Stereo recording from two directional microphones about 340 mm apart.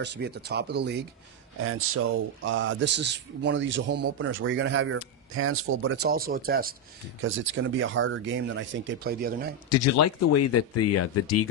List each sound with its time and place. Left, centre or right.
0.0 s speech: right
9.7 s speech: left